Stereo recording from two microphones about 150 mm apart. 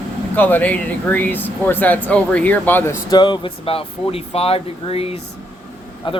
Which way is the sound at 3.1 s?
30° left (ahead or behind).